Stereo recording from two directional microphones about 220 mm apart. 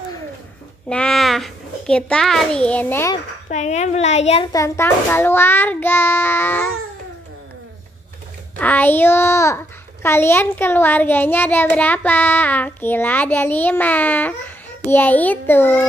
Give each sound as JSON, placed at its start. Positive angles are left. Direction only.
{"t": 0.8, "sound": "a child's voice", "side_deg": 5}
{"t": 3.4, "sound": "a woman's voice", "side_deg": 30}
{"t": 4.5, "sound": "a child's voice", "side_deg": 15}
{"t": 8.5, "sound": "a child's voice", "side_deg": 10}